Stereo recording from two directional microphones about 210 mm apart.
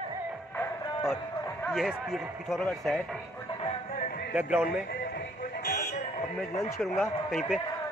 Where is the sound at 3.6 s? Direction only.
40° left (ahead or behind).